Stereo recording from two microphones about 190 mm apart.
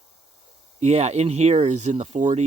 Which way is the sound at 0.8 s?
35° right (ahead or behind).